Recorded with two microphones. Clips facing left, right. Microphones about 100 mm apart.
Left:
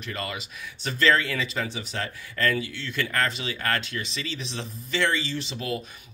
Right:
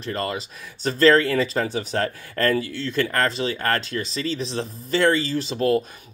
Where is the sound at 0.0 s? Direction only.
35° right (ahead or behind).